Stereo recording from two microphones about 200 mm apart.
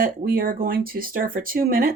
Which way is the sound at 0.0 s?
45° right (ahead or behind).